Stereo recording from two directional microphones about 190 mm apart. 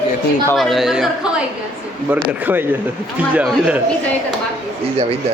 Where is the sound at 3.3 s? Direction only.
5° right (ahead or behind).